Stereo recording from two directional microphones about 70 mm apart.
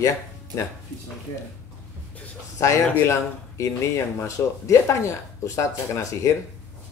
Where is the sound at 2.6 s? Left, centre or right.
Left.